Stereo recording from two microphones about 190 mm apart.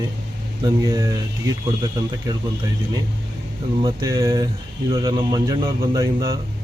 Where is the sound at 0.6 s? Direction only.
20° right (ahead or behind).